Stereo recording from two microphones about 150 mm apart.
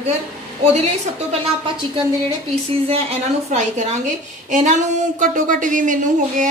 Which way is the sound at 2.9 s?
45° right (ahead or behind).